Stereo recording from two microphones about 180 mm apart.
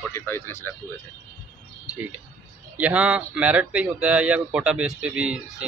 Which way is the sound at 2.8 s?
5° right (ahead or behind).